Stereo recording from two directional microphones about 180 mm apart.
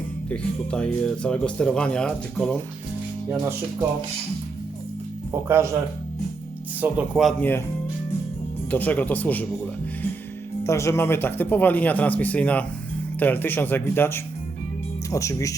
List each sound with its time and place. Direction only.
0.3 s speech: 5° left (ahead or behind)
5.3 s speech: 15° right (ahead or behind)
6.8 s speech: 5° right (ahead or behind)
8.7 s speech: 10° left (ahead or behind)
10.6 s speech: 15° left (ahead or behind)